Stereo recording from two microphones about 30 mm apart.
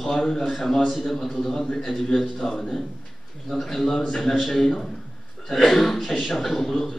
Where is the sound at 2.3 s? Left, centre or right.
Centre.